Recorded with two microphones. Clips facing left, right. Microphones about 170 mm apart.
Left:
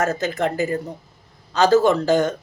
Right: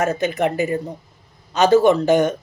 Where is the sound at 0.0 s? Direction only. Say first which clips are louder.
Right 2 dB; 15° right (ahead or behind).